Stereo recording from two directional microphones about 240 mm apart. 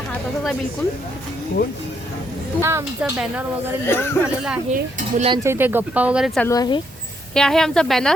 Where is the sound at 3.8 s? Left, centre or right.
Centre.